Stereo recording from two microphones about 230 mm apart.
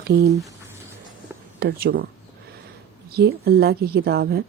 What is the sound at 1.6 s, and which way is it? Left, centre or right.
Speech, right.